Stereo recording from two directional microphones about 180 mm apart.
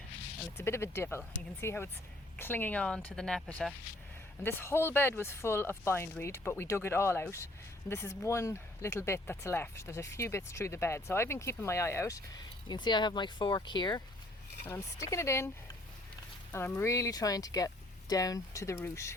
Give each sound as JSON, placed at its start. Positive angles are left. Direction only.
{"t": 0.5, "sound": "speech", "side_deg": 15}
{"t": 16.5, "sound": "speech", "side_deg": 10}